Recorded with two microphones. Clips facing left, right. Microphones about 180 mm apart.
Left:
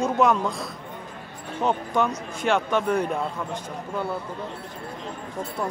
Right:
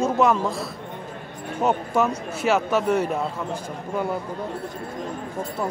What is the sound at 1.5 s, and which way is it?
Speech, 5° right (ahead or behind).